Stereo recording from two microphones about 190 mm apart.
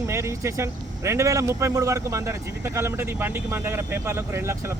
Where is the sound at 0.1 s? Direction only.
15° right (ahead or behind).